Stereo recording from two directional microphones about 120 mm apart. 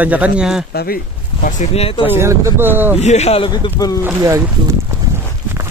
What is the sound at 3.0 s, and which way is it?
Speech, 65° left (ahead or behind).